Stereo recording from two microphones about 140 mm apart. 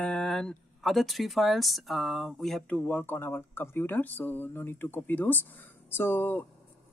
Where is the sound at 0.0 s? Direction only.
5° left (ahead or behind).